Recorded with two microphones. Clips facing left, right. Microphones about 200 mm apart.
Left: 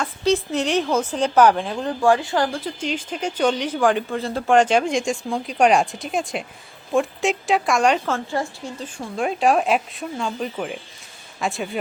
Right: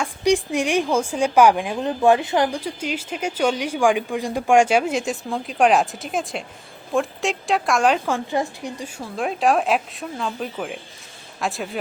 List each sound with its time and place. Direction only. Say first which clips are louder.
0.0 s speech: right 1 dB; 15° right (ahead or behind)
8.0 s speech: right 1 dB; 15° right (ahead or behind)
9.1 s speech: left 1 dB; centre (ahead or behind)